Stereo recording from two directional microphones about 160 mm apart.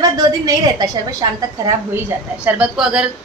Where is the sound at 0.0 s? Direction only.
25° right (ahead or behind).